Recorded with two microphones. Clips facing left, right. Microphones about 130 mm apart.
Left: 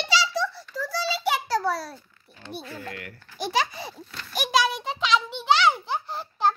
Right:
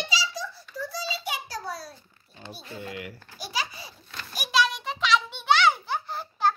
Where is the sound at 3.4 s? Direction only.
55° left (ahead or behind).